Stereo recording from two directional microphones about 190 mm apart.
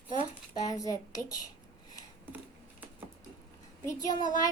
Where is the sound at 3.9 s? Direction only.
20° left (ahead or behind).